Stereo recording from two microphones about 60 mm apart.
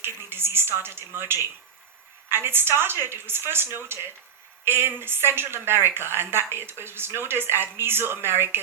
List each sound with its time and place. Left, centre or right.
0.0 s speech: right